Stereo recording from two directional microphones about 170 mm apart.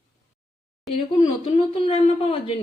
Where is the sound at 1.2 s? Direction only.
35° left (ahead or behind).